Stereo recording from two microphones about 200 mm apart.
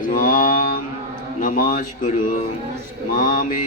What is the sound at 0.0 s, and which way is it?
Mantra, 45° left (ahead or behind).